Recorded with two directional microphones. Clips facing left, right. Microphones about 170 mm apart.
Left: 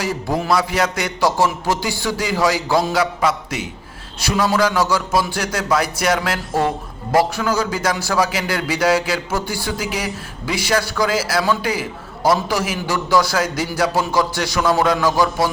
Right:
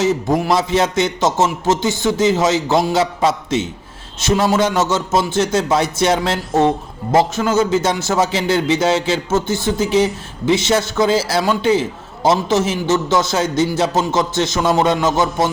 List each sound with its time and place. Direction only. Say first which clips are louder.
0.0 s a man's voice: right 5 dB; 20° right (ahead or behind)